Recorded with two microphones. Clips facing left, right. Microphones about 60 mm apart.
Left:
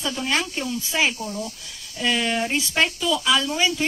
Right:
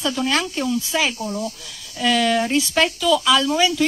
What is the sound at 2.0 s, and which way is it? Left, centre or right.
Speech, centre.